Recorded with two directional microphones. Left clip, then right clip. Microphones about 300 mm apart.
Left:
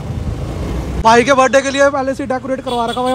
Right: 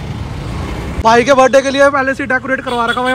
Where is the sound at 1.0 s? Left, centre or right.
Centre.